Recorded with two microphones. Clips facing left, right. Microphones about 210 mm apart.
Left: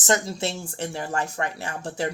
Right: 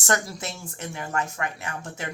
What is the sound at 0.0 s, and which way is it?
Speech, 20° left (ahead or behind).